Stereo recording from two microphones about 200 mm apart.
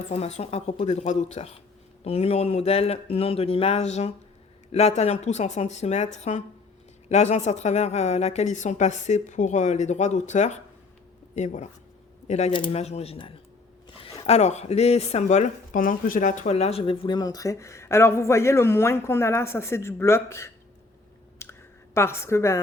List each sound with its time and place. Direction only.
0.1 s speech: 35° left (ahead or behind); by 20.5 s 15° left (ahead or behind)
21.4 s clicking: 15° left (ahead or behind)
21.9 s speech: 10° left (ahead or behind)